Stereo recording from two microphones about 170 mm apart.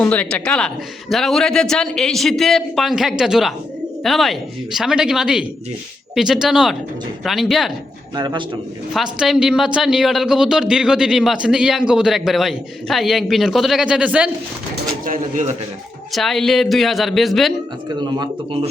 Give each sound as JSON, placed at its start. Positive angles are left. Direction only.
{"t": 0.0, "sound": "a woman's voice", "side_deg": 10}
{"t": 8.1, "sound": "speech", "side_deg": -25}
{"t": 8.9, "sound": "speech", "side_deg": 0}
{"t": 15.0, "sound": "speech", "side_deg": -50}
{"t": 16.1, "sound": "speech", "side_deg": 0}
{"t": 17.8, "sound": "speech", "side_deg": -25}